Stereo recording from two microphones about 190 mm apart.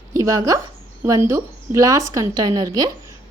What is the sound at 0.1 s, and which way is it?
A woman's voice, 15° right (ahead or behind).